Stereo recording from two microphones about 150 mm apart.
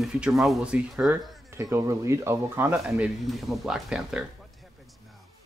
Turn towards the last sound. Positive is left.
turn(degrees=-5)  # may be behind; listen again after turning